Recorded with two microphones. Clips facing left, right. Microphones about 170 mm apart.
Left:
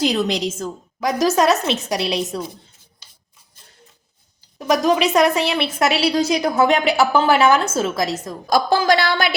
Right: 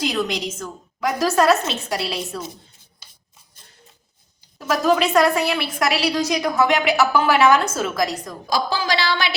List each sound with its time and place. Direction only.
0.0 s a woman's voice: 30° left (ahead or behind)
4.5 s a woman's voice: 15° left (ahead or behind)
8.4 s a woman's voice: 50° left (ahead or behind)